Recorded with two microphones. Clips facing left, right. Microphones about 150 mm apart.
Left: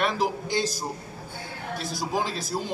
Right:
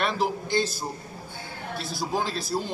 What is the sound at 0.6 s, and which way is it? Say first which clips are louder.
A man's voice: right 1 dB; 40° left (ahead or behind).